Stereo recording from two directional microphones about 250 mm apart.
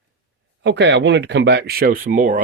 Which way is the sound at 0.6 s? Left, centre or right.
Right.